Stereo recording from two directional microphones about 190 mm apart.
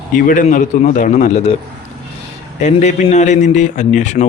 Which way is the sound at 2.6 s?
35° left (ahead or behind).